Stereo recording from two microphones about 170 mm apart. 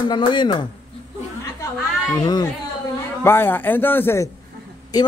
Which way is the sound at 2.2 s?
25° left (ahead or behind).